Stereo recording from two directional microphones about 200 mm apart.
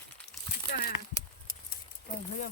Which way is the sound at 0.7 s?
50° left (ahead or behind).